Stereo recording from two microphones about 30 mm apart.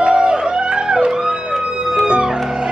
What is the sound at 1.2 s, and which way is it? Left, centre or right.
Music, right.